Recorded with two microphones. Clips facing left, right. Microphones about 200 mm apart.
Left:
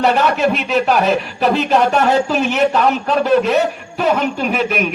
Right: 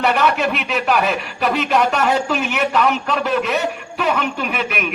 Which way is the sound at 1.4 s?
35° left (ahead or behind).